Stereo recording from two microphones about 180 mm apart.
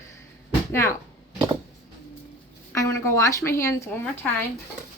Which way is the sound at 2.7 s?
15° left (ahead or behind).